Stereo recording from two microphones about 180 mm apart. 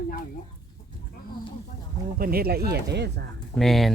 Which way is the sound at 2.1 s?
55° right (ahead or behind).